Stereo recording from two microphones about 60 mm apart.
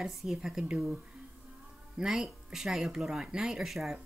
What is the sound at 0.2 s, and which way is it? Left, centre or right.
Speech, centre.